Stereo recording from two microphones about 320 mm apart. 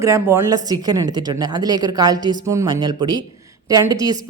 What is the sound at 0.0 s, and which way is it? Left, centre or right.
Speech, centre.